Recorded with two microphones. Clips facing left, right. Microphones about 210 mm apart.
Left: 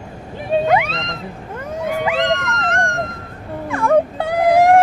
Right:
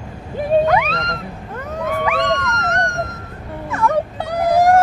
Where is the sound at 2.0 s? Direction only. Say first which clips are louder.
Left 1 dB; 30° left (ahead or behind).